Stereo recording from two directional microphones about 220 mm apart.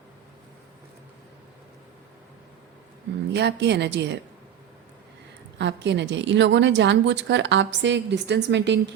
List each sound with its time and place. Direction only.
3.3 s a woman's voice: 50° right (ahead or behind)
5.5 s a woman's voice: 50° right (ahead or behind)